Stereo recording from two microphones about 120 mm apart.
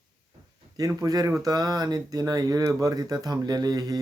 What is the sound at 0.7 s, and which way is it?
Speech, 30° right (ahead or behind).